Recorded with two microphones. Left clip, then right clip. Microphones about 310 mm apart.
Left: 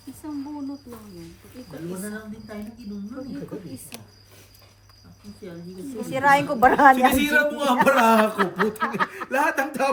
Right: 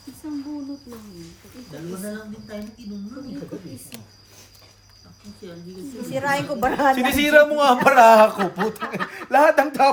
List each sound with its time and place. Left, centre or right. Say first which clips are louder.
6.1 s a woman's voice: left 4 dB; centre
6.9 s speech: right 3 dB; right
8.4 s a woman's voice: left 1 dB; centre
9.3 s speech: right 9 dB; right